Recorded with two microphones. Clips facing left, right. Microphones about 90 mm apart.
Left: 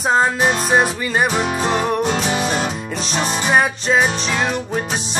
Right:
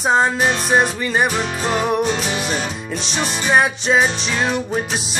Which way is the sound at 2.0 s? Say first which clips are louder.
Left 1 dB; 15° left (ahead or behind).